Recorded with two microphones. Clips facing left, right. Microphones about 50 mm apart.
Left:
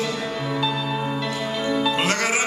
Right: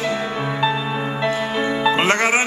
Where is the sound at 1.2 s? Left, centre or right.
Right.